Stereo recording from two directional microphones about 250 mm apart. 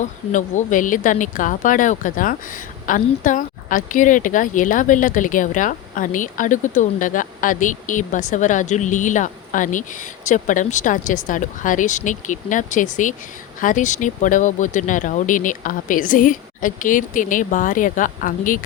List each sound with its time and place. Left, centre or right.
0.0 s a woman's voice: left